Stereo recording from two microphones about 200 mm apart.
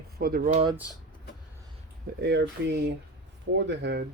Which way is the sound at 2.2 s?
60° right (ahead or behind).